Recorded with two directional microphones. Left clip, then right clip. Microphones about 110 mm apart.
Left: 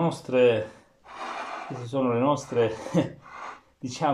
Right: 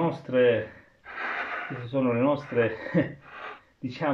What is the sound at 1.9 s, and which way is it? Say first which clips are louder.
Speech: left 1 dB; centre (ahead or behind).